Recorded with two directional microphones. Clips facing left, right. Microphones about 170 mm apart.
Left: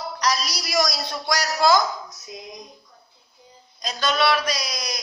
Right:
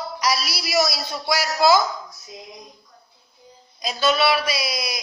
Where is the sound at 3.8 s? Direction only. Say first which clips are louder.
Right 3 dB; 5° right (ahead or behind).